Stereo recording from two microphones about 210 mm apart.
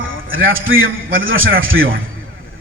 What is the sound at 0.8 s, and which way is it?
A man's voice, 45° right (ahead or behind).